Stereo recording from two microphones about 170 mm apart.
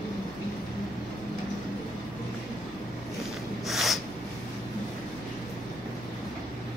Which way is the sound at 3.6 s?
Centre (ahead or behind).